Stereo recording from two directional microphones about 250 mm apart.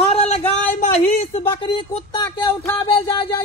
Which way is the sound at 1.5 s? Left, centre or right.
Left.